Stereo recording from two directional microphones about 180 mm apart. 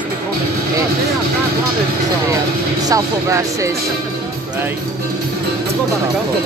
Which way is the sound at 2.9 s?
15° right (ahead or behind).